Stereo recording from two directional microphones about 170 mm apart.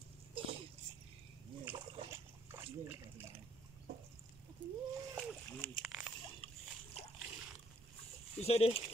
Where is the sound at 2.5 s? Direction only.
15° right (ahead or behind).